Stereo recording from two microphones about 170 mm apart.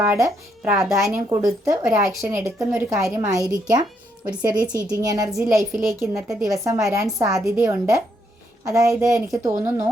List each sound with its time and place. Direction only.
0.0 s a woman's voice: 15° right (ahead or behind)